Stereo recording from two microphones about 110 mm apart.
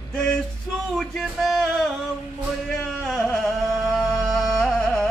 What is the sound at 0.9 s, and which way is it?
Music, centre (ahead or behind).